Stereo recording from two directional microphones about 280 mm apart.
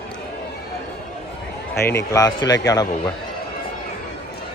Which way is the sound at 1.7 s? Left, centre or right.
Left.